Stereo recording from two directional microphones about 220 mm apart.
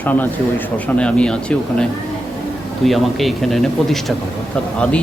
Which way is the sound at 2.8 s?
Centre (ahead or behind).